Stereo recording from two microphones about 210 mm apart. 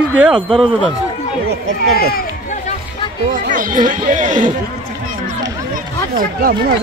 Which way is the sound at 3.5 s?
40° right (ahead or behind).